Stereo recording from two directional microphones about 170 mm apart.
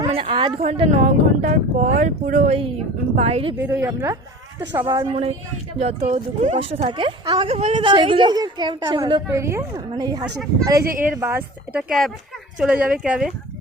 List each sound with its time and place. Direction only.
0.0 s a woman's voice: 30° right (ahead or behind)
0.6 s speech: 40° right (ahead or behind)
3.2 s a woman's voice: 35° right (ahead or behind)
3.6 s a woman's voice: 15° right (ahead or behind)
4.9 s a woman's voice: 30° right (ahead or behind)
6.1 s a woman's voice: 45° right (ahead or behind)
9.3 s a woman's voice: 15° right (ahead or behind)
10.8 s speech: 55° right (ahead or behind)
11.1 s speech: 10° right (ahead or behind)